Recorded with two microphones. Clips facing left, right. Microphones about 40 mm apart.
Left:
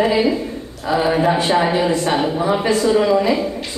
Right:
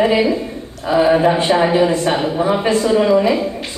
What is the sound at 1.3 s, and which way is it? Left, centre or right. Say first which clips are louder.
Speech: right 1 dB; right.